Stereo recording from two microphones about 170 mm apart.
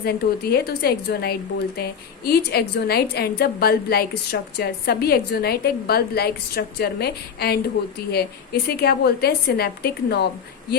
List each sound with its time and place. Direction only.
0.0 s speech: 65° left (ahead or behind)